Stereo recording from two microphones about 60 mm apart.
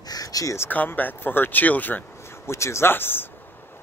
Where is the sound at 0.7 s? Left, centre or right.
Left.